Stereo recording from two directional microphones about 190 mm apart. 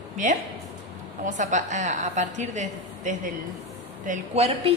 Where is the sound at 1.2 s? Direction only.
40° right (ahead or behind).